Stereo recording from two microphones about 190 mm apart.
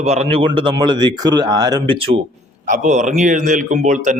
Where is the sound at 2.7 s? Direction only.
40° right (ahead or behind).